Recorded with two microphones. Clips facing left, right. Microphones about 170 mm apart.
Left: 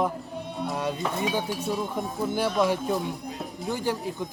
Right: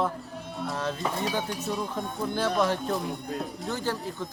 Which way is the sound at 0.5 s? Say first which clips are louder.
Left 2 dB; centre (ahead or behind).